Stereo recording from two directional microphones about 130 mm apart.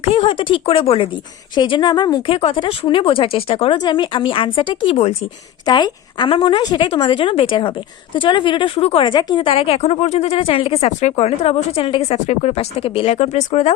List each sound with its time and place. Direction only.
0.0 s a woman's voice: 45° left (ahead or behind)
2.3 s speech: 45° left (ahead or behind)
3.8 s a woman's voice: 35° left (ahead or behind); by 13.7 s 55° left (ahead or behind)